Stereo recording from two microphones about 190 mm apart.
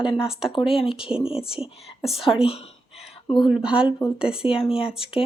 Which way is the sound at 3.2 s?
25° left (ahead or behind).